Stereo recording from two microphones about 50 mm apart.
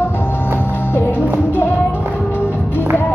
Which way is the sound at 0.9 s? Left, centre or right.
Left.